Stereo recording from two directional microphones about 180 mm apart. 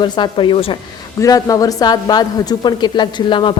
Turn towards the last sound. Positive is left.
turn(degrees=25)  # may be behind; listen again after turning